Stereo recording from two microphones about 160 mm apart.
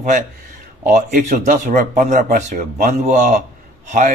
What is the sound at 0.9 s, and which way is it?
Speech, 50° right (ahead or behind).